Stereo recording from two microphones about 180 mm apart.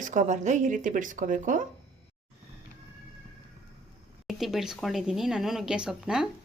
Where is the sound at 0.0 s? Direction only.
45° right (ahead or behind).